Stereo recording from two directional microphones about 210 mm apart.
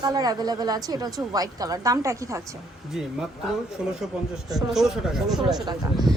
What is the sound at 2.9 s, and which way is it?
Speech, 5° right (ahead or behind).